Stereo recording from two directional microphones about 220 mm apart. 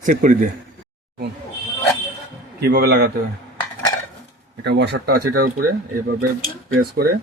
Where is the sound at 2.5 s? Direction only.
45° right (ahead or behind).